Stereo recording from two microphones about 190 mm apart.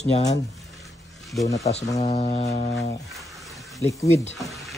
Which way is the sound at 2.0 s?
35° left (ahead or behind).